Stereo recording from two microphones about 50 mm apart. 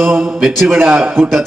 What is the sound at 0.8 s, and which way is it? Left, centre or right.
Speech, right.